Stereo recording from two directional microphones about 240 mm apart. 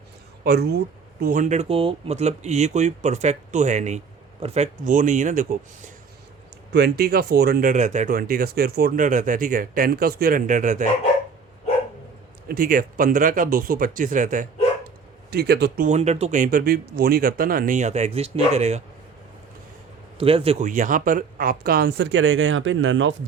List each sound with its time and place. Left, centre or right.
0.4 s speech: right
6.7 s speech: right
12.5 s speech: right
15.9 s speech: right
20.1 s speech: right